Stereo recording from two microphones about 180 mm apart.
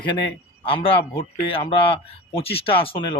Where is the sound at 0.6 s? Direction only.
30° left (ahead or behind).